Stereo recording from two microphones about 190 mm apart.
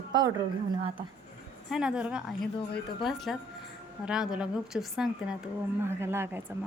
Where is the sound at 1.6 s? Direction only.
5° right (ahead or behind).